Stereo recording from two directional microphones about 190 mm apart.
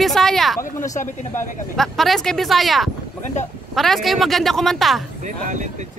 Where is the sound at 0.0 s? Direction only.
Centre (ahead or behind).